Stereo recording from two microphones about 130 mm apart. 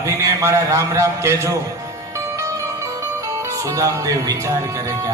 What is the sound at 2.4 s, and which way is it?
Music, 25° right (ahead or behind).